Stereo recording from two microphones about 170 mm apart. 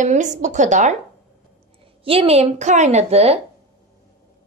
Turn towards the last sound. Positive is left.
turn(degrees=-35)  # may be behind; listen again after turning